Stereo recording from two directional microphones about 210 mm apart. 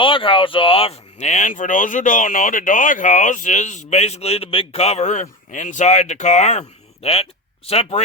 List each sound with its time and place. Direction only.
0.0 s speech: 25° left (ahead or behind)